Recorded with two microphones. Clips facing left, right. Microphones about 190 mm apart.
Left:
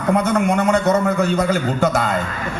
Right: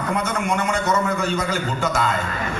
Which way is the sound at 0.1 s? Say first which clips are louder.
Left 8 dB; 60° left (ahead or behind).